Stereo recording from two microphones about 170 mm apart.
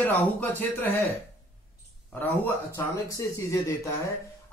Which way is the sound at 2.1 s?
10° left (ahead or behind).